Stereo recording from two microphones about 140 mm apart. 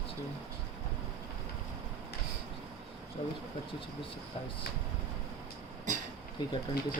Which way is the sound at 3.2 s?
40° left (ahead or behind).